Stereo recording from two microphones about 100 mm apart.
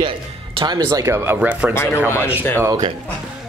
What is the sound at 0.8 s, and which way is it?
Speech, 35° right (ahead or behind).